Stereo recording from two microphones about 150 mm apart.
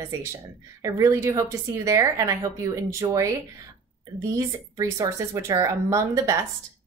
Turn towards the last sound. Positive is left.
turn(degrees=-20)  # may be behind; listen again after turning